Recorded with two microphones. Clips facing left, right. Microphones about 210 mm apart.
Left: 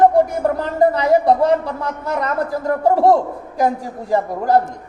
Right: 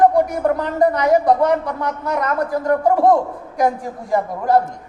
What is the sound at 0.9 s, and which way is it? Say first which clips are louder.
Speech: left 1 dB; 30° left (ahead or behind).